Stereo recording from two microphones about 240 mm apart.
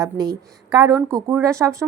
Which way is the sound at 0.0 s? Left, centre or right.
Centre.